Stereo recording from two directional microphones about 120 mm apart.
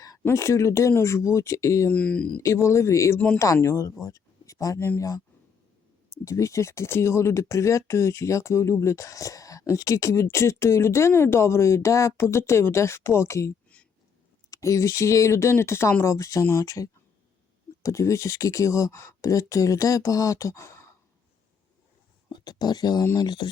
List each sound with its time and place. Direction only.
0.2 s speech: 20° left (ahead or behind)
1.9 s speech: 10° left (ahead or behind)
2.4 s speech: 25° left (ahead or behind)
6.2 s speech: 25° left (ahead or behind)
13.7 s a sound: 10° left (ahead or behind)
14.5 s speech: 25° left (ahead or behind)
22.3 s speech: 35° left (ahead or behind)